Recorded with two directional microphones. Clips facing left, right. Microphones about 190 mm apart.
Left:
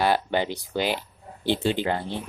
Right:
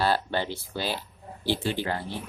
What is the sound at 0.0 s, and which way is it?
Speech, 15° left (ahead or behind).